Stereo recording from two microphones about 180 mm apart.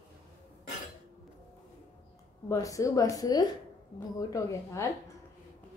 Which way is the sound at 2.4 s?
20° left (ahead or behind).